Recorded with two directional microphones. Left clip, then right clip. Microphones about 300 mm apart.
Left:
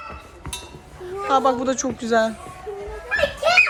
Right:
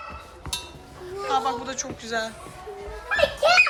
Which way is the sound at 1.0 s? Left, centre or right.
Centre.